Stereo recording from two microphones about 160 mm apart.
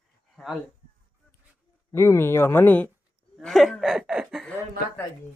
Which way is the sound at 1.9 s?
15° left (ahead or behind).